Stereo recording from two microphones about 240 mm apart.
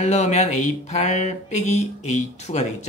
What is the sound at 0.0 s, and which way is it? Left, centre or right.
Speech, left.